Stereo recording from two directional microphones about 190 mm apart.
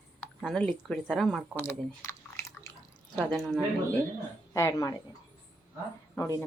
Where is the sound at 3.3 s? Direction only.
Centre (ahead or behind).